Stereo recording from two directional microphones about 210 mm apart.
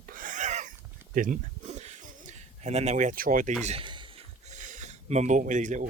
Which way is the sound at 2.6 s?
30° right (ahead or behind).